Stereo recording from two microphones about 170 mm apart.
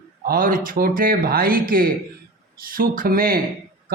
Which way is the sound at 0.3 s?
55° right (ahead or behind).